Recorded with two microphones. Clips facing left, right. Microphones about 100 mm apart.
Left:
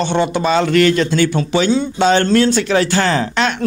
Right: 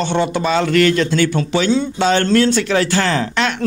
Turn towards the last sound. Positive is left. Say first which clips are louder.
# left 2 dB
turn(degrees=25)  # may be behind; listen again after turning